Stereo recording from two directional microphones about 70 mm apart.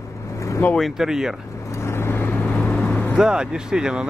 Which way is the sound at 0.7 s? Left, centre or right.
Centre.